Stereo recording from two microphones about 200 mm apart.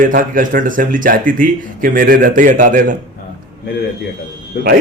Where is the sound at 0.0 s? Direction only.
45° right (ahead or behind).